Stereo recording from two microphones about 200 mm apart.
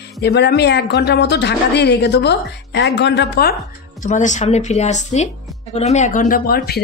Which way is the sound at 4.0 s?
40° left (ahead or behind).